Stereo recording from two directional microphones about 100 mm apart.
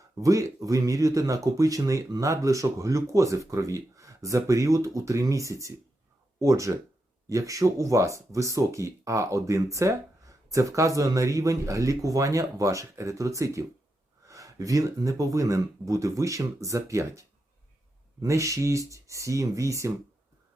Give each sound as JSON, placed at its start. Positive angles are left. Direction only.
{"t": 0.2, "sound": "speech", "side_deg": -35}